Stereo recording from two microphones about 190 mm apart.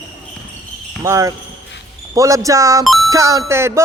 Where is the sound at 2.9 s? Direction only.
Centre (ahead or behind).